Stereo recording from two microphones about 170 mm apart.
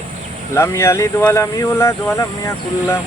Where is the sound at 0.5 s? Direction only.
15° left (ahead or behind).